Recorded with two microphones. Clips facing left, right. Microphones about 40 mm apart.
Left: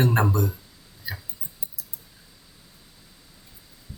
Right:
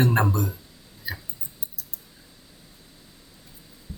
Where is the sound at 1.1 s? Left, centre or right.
Centre.